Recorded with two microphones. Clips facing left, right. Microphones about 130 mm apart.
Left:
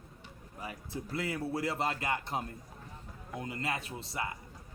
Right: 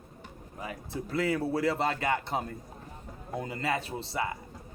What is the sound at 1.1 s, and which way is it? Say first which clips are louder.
Speech: right 7 dB; 30° right (ahead or behind).